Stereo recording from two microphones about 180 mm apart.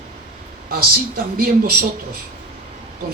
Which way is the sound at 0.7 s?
55° right (ahead or behind).